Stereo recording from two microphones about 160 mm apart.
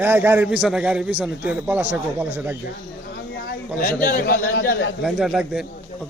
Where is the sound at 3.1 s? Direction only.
75° left (ahead or behind).